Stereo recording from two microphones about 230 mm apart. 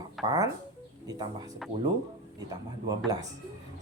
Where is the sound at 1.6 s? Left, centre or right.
Centre.